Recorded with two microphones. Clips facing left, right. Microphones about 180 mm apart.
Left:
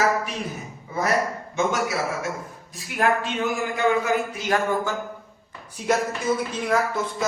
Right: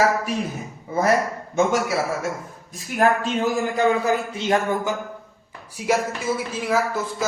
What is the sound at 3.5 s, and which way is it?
A man's voice, 35° right (ahead or behind).